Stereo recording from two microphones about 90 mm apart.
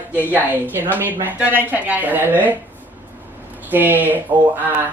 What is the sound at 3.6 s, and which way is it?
Speech, 20° right (ahead or behind).